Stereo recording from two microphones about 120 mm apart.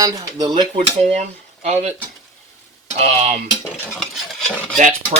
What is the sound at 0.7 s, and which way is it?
Speech, 75° right (ahead or behind).